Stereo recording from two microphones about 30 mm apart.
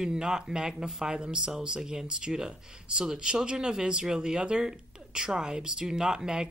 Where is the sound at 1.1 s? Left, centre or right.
Right.